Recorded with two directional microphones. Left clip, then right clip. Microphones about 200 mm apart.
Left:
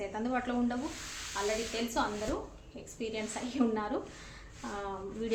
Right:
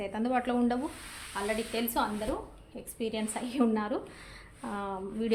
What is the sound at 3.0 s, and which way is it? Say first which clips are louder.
A woman's voice: right 3 dB; 50° right (ahead or behind).